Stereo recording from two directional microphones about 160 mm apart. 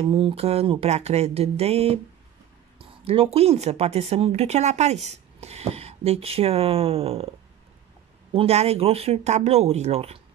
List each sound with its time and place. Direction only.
0.0 s speech: 35° right (ahead or behind)
8.3 s speech: 40° right (ahead or behind)